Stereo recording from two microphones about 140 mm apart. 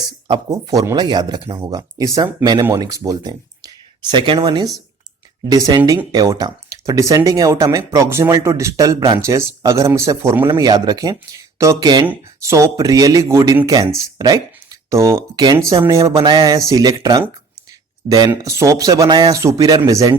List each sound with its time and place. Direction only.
0.5 s speech: 25° right (ahead or behind)
10.4 s speech: 35° right (ahead or behind)
18.3 s speech: 20° right (ahead or behind)